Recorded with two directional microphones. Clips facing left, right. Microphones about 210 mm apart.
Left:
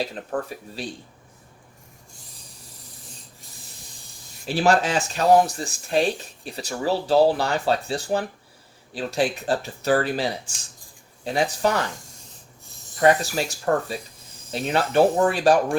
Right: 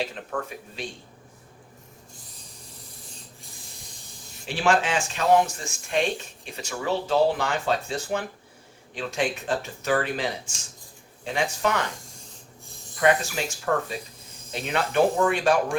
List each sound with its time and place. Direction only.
0.0 s speech: 35° left (ahead or behind)
4.4 s speech: 40° left (ahead or behind)
13.0 s speech: 35° left (ahead or behind)